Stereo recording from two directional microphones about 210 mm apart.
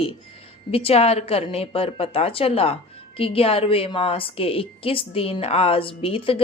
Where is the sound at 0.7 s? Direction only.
25° left (ahead or behind).